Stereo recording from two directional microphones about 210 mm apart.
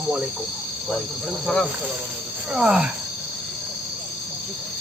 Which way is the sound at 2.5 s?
5° right (ahead or behind).